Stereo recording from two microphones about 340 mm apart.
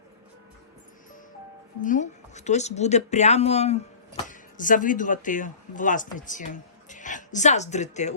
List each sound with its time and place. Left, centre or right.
1.8 s speech: left